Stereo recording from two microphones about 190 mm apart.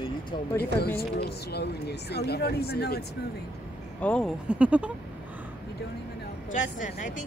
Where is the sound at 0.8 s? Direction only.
55° left (ahead or behind).